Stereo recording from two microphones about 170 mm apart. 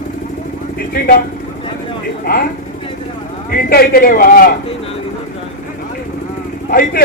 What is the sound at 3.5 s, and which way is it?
A man's voice, 60° left (ahead or behind).